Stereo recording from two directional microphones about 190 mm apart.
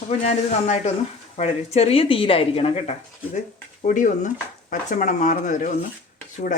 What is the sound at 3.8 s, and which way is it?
Speech, 40° left (ahead or behind).